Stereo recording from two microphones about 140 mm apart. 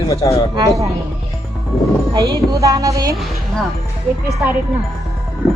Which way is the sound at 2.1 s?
25° right (ahead or behind).